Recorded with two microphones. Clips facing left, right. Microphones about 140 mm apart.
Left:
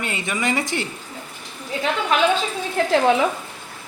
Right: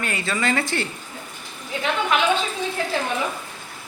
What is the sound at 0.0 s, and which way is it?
Speech, 20° left (ahead or behind).